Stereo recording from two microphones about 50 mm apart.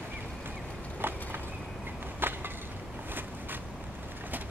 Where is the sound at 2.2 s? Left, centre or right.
Right.